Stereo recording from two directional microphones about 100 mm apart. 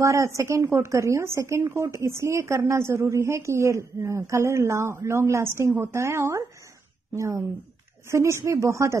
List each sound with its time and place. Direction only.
0.0 s speech: 30° right (ahead or behind)